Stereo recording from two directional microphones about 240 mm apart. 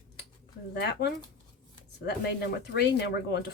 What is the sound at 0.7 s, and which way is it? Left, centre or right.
Speech, left.